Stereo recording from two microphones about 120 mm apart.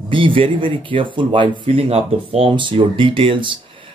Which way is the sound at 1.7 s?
55° right (ahead or behind).